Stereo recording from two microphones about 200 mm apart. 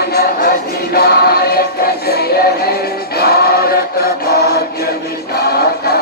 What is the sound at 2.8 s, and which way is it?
Choir, 50° left (ahead or behind).